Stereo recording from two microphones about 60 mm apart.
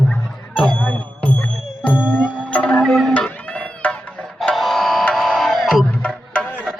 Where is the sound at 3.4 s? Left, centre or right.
Left.